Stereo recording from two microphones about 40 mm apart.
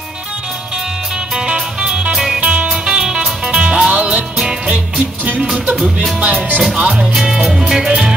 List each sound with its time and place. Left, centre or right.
1.3 s music: centre
2.1 s music: centre
2.4 s music: right
2.7 s music: centre
6.2 s music: right
7.4 s music: centre
7.8 s music: centre